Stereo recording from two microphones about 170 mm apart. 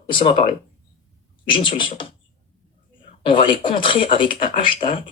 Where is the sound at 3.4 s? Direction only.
30° left (ahead or behind).